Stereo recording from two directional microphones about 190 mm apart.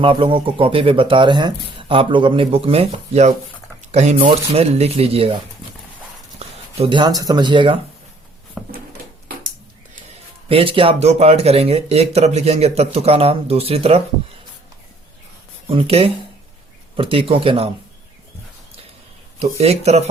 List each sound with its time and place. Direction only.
0.0 s speech: 30° right (ahead or behind)
6.7 s speech: 25° right (ahead or behind)
8.6 s a sound: centre (ahead or behind)
10.1 s speech: 30° right (ahead or behind)
15.6 s speech: 30° right (ahead or behind)
19.4 s speech: 35° right (ahead or behind)